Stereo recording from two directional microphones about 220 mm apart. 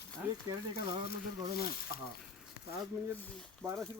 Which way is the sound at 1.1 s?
45° left (ahead or behind).